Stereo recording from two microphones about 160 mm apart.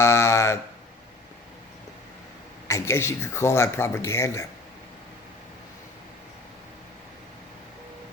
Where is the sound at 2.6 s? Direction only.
15° left (ahead or behind).